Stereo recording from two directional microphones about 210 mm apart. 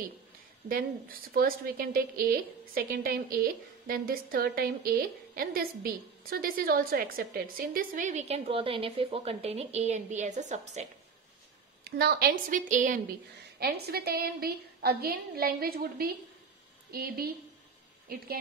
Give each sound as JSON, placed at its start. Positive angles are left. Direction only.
{"t": 0.7, "sound": "a woman's voice", "side_deg": -45}
{"t": 11.8, "sound": "a woman's voice", "side_deg": -50}
{"t": 13.6, "sound": "a woman's voice", "side_deg": -50}